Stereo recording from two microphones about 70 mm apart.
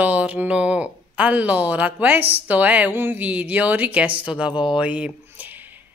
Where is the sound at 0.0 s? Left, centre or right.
Right.